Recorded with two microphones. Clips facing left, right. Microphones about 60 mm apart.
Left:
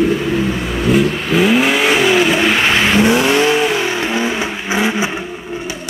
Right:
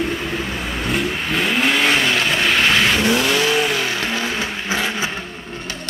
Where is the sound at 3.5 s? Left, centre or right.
Centre.